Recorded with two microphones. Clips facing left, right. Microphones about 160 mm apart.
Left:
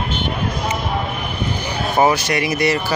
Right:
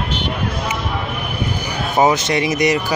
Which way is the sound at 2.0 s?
20° right (ahead or behind).